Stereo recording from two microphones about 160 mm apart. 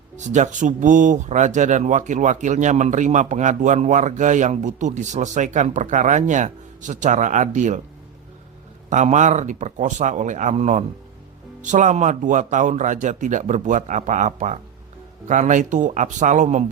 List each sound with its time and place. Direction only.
0.2 s speech: 50° right (ahead or behind)
8.9 s speech: 50° right (ahead or behind)